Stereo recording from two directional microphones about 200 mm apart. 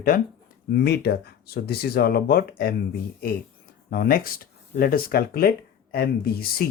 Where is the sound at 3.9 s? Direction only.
45° left (ahead or behind).